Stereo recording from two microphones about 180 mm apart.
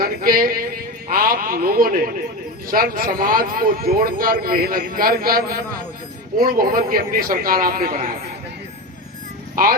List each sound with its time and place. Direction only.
0.0 s a man's voice: 55° right (ahead or behind)
9.6 s speech: 50° right (ahead or behind)